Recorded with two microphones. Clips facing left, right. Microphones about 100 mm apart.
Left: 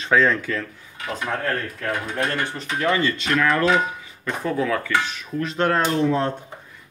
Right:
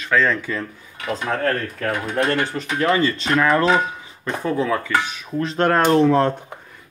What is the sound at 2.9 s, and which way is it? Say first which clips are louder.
Speech: right 2 dB; 35° right (ahead or behind).